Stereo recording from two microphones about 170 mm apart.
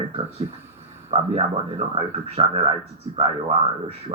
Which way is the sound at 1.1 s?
35° right (ahead or behind).